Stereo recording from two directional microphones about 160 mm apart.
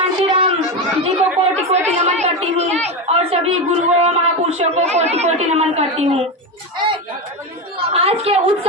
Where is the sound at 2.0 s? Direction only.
45° right (ahead or behind).